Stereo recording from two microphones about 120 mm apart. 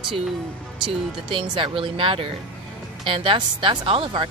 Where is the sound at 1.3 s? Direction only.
45° right (ahead or behind).